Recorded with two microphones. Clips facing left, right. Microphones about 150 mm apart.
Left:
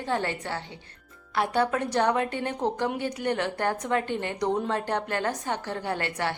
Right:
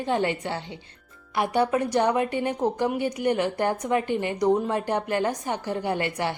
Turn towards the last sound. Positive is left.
turn(degrees=-15)  # may be behind; listen again after turning